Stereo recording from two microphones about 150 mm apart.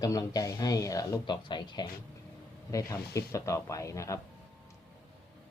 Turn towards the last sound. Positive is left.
turn(degrees=20)  # may be behind; listen again after turning